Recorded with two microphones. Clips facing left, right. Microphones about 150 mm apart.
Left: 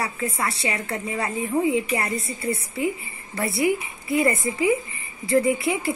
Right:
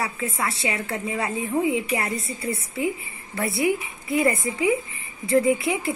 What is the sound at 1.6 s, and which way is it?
Speech, 30° left (ahead or behind).